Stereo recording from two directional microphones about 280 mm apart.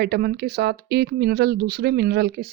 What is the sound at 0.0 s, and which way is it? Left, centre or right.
Speech, right.